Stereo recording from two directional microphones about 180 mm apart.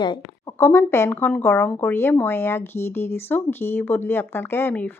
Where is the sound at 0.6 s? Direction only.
15° left (ahead or behind).